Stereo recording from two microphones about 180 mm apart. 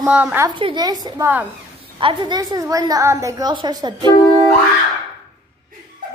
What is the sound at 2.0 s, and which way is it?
A woman's voice, 25° right (ahead or behind).